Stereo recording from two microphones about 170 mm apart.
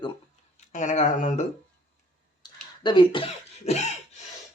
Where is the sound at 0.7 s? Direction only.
45° left (ahead or behind).